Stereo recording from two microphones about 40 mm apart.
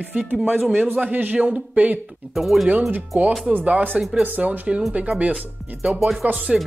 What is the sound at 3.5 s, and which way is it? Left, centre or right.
Speech, right.